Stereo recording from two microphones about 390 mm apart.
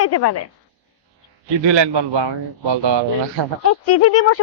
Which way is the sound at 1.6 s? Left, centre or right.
Right.